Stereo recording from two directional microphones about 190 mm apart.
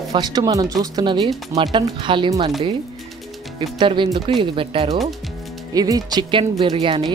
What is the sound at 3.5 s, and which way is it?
Speech, 25° right (ahead or behind).